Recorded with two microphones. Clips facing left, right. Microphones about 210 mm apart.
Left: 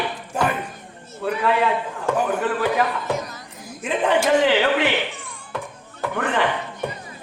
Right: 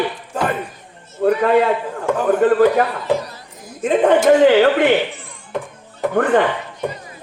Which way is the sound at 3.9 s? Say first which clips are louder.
Right 7 dB; 45° right (ahead or behind).